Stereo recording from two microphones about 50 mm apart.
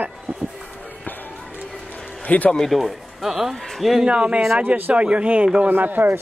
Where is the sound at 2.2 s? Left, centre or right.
Left.